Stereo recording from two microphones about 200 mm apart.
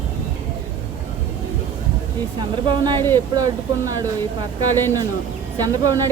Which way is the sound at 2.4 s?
20° right (ahead or behind).